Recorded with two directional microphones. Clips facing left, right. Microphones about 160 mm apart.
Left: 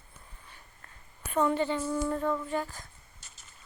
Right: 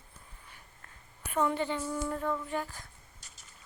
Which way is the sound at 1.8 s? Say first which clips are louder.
Left 4 dB; centre (ahead or behind).